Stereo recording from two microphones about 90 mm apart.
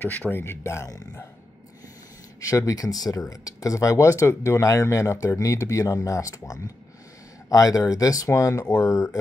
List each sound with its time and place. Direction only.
0.0 s speech: 20° left (ahead or behind)
2.5 s speech: 40° left (ahead or behind)